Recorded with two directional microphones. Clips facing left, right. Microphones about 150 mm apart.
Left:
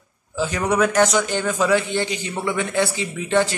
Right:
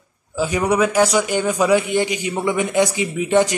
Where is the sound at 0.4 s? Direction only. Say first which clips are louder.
Right 2 dB; 10° right (ahead or behind).